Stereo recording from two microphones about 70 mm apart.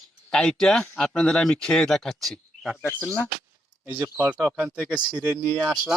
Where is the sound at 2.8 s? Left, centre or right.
Left.